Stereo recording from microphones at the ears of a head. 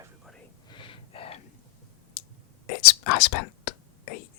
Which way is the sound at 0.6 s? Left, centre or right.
Left.